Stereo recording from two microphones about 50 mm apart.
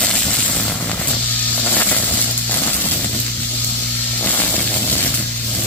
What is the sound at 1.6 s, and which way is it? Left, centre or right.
Vehicle, left.